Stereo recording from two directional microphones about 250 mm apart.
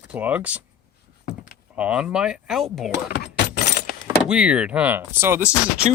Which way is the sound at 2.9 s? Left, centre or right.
Left.